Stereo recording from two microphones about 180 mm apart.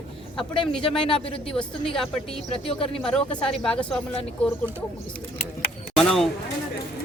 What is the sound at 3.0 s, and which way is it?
Speech, 5° left (ahead or behind).